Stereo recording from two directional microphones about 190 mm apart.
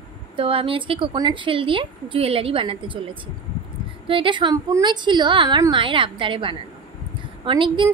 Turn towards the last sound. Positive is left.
turn(degrees=-25)  # may be behind; listen again after turning